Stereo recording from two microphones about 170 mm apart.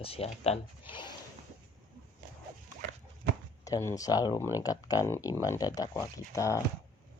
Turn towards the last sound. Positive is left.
turn(degrees=15)  # may be behind; listen again after turning